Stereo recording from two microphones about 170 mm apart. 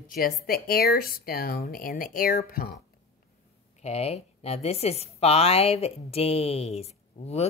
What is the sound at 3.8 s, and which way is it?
A woman's voice, 40° left (ahead or behind).